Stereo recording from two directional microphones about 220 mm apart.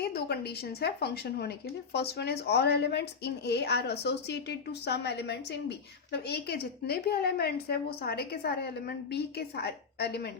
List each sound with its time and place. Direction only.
0.0 s speech: 45° left (ahead or behind)